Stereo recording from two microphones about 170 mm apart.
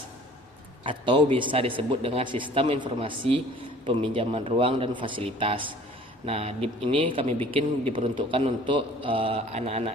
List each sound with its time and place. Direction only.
0.9 s speech: 30° right (ahead or behind)